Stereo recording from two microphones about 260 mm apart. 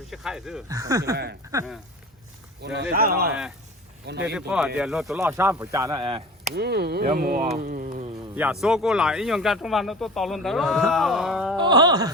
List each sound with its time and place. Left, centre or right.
0.1 s speech: centre
0.7 s speech: centre
1.1 s speech: right
2.9 s speech: right
4.4 s speech: centre
6.5 s speech: right
8.6 s speech: centre
11.5 s speech: centre